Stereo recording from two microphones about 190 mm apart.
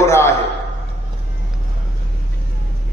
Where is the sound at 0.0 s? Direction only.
15° left (ahead or behind).